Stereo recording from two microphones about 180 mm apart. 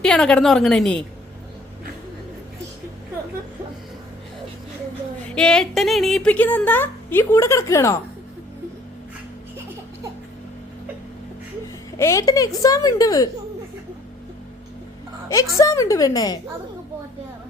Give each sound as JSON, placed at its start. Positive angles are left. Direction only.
{"t": 0.0, "sound": "a woman's voice", "side_deg": 5}
{"t": 5.3, "sound": "a woman's voice", "side_deg": 5}
{"t": 11.9, "sound": "a woman's voice", "side_deg": 15}
{"t": 15.3, "sound": "a woman's voice", "side_deg": 20}